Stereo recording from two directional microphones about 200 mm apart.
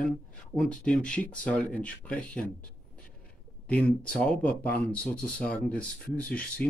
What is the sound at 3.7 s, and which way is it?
Speech, 5° left (ahead or behind).